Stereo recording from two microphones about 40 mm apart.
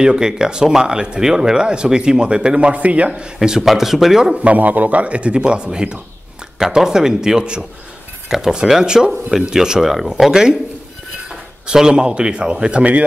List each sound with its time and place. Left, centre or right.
0.0 s speech: centre
3.6 s speech: centre
4.4 s a man's voice: right; by 10.6 s centre
11.6 s speech: centre